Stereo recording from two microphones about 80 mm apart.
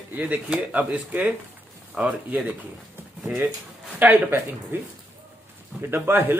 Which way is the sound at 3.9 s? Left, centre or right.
Right.